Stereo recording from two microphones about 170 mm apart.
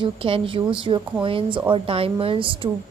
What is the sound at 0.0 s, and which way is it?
A woman's voice, 30° right (ahead or behind).